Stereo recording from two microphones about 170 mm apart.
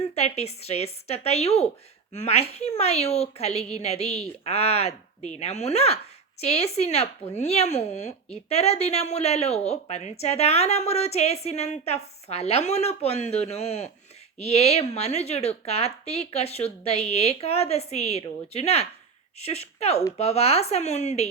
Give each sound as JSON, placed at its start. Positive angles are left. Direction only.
{"t": 0.0, "sound": "a woman's voice", "side_deg": 40}